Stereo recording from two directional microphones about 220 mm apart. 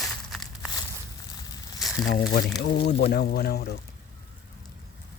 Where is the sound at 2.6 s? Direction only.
50° left (ahead or behind).